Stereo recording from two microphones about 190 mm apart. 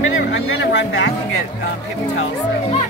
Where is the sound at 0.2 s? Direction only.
75° left (ahead or behind).